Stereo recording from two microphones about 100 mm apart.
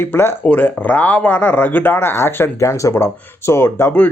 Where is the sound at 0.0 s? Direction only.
25° left (ahead or behind).